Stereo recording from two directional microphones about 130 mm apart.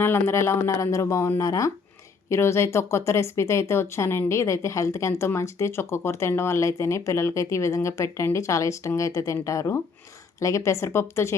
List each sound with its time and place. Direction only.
0.0 s speech: 20° left (ahead or behind)